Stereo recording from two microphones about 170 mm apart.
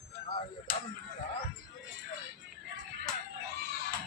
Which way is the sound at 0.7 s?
45° right (ahead or behind).